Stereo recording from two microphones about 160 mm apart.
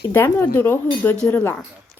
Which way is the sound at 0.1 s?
15° left (ahead or behind).